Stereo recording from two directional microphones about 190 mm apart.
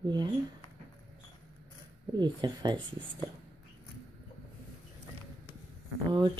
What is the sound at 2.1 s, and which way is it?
Speech, 20° right (ahead or behind).